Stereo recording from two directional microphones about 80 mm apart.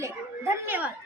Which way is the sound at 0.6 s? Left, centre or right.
Right.